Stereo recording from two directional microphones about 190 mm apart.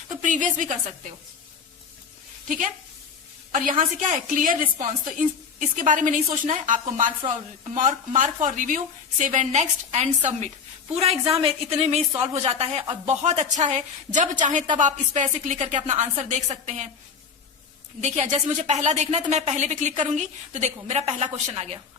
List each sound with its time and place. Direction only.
0.2 s a woman's voice: 40° right (ahead or behind)
3.5 s a woman's voice: 45° right (ahead or behind)
18.0 s speech: 35° right (ahead or behind)